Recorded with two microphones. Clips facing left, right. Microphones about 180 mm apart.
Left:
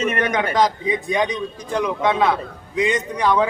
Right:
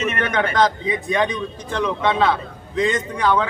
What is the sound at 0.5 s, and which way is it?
A man's voice, 15° left (ahead or behind).